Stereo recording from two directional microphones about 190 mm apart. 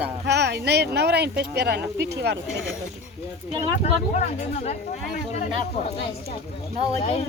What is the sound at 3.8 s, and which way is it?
Speech, 35° left (ahead or behind).